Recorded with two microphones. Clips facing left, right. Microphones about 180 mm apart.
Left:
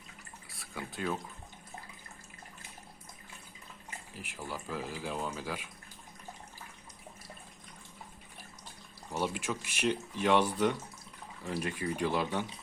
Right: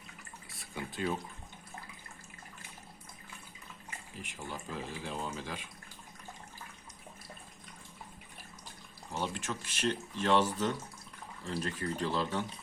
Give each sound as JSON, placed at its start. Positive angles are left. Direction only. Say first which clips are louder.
{"t": 0.5, "sound": "speech", "louder": "right 1 dB", "side_deg": 0}
{"t": 4.2, "sound": "speech", "louder": "left 2 dB", "side_deg": 5}
{"t": 9.1, "sound": "speech", "louder": "left 3 dB", "side_deg": 10}